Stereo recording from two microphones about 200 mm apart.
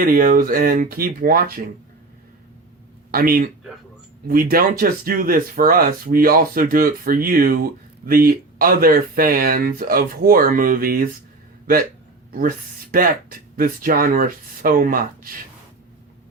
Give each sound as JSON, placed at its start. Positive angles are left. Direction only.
{"t": 0.0, "sound": "speech", "side_deg": -45}
{"t": 3.1, "sound": "speech", "side_deg": -45}
{"t": 12.3, "sound": "speech", "side_deg": -45}